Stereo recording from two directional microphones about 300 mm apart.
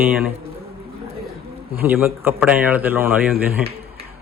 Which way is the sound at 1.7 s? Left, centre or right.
Centre.